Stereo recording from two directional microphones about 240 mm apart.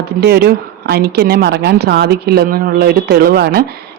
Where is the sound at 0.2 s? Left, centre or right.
Right.